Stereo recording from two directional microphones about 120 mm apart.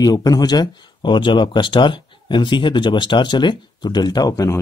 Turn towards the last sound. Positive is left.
turn(degrees=30)  # may be behind; listen again after turning